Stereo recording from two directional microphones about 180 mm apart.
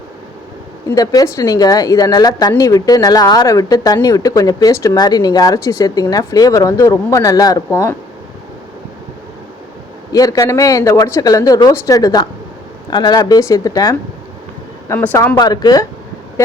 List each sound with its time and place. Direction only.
0.9 s a woman's voice: 20° left (ahead or behind)
10.1 s a woman's voice: 20° left (ahead or behind)